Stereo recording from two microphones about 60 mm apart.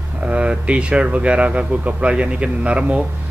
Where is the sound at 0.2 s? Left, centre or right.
Right.